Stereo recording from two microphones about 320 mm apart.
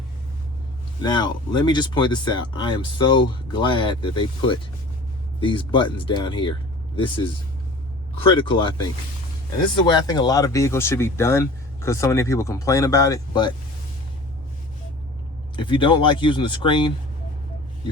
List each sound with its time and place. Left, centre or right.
1.0 s speech: centre
15.5 s speech: centre